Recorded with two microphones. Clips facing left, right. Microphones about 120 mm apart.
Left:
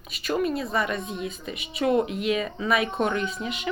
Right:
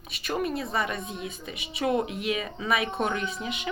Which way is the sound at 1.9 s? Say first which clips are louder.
Left 4 dB; 40° left (ahead or behind).